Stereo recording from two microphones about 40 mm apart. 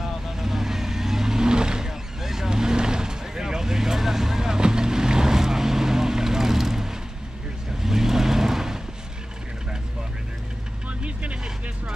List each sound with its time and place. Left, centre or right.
0.0 s vehicle: centre
10.9 s vehicle: right